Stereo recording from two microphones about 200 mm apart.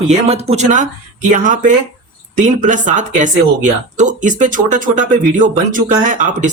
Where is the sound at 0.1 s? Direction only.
30° right (ahead or behind).